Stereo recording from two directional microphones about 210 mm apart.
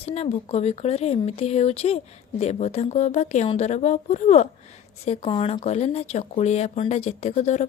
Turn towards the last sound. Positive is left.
turn(degrees=35)  # may be behind; listen again after turning